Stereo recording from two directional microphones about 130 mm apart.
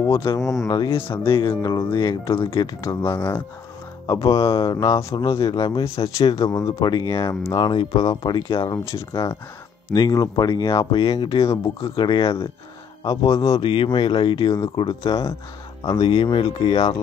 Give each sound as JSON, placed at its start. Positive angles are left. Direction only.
{"t": 0.7, "sound": "speech", "side_deg": 40}
{"t": 3.2, "sound": "a man's voice", "side_deg": 20}
{"t": 6.2, "sound": "speech", "side_deg": 45}
{"t": 6.5, "sound": "speech", "side_deg": 30}
{"t": 8.9, "sound": "a man's voice", "side_deg": 25}
{"t": 11.0, "sound": "speech", "side_deg": 40}
{"t": 13.0, "sound": "a man's voice", "side_deg": 25}
{"t": 13.6, "sound": "speech", "side_deg": 40}